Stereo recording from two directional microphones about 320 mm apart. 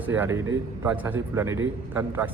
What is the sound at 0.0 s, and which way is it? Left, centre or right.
A man's voice, centre.